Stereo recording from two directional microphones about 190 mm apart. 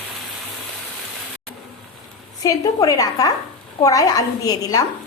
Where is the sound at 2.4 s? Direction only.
20° left (ahead or behind).